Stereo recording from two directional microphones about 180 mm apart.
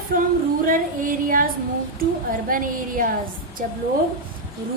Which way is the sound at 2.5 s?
50° right (ahead or behind).